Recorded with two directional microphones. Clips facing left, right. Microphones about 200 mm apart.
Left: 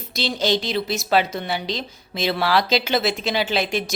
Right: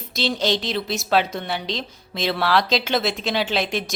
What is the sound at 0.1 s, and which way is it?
A woman's voice, centre (ahead or behind).